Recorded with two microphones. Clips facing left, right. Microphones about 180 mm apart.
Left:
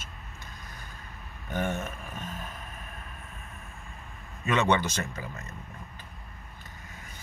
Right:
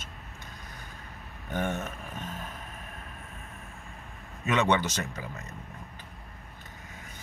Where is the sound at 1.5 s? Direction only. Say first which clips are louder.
Even; 15° left (ahead or behind).